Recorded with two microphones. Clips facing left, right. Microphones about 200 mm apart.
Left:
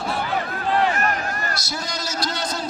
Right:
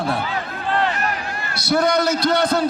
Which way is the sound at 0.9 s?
45° left (ahead or behind).